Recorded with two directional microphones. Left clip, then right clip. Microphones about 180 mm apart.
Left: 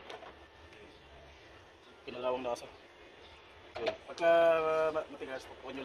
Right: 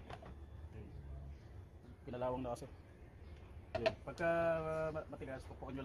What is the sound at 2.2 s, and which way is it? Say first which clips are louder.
Speech: left 7 dB; 30° right (ahead or behind).